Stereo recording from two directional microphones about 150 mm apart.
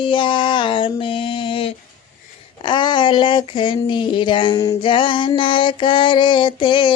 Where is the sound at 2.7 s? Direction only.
30° left (ahead or behind).